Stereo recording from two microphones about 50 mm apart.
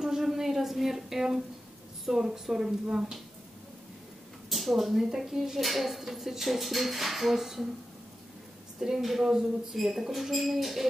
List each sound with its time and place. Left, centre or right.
0.0 s a sound: centre
2.0 s speech: centre
4.5 s speech: centre
8.8 s speech: centre